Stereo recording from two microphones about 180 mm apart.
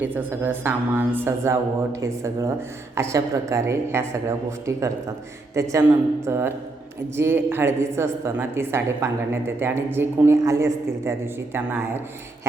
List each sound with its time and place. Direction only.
0.0 s a woman's voice: 10° right (ahead or behind)
5.5 s a woman's voice: 15° right (ahead or behind)